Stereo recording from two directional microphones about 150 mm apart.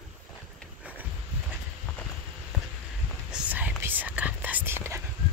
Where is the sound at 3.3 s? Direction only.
10° right (ahead or behind).